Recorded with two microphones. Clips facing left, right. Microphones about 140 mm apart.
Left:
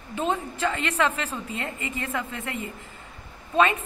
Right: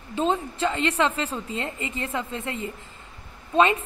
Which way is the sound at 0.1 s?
25° right (ahead or behind).